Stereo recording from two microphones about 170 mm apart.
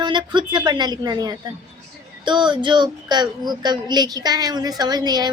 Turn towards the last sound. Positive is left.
turn(degrees=-25)  # may be behind; listen again after turning